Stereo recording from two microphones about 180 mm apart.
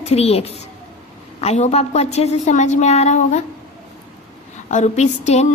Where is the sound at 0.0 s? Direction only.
35° left (ahead or behind).